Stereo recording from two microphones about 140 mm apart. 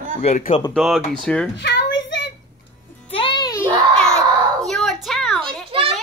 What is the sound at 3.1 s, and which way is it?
Music, 35° left (ahead or behind).